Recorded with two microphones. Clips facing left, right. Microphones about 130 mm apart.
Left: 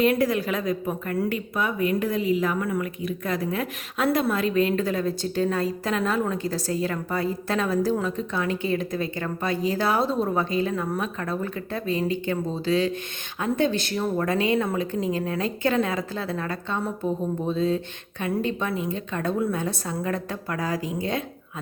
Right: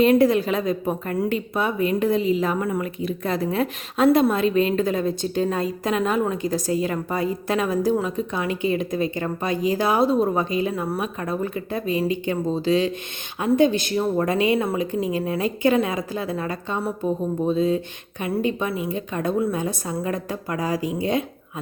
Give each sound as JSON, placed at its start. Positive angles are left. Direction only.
{"t": 0.0, "sound": "a woman's voice", "side_deg": -25}